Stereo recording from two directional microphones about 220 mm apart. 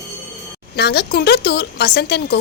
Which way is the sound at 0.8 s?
50° left (ahead or behind).